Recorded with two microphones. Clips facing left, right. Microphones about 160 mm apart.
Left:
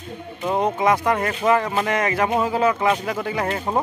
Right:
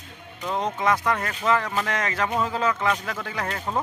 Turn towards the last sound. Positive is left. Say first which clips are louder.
# left 6 dB
turn(degrees=15)  # may be behind; listen again after turning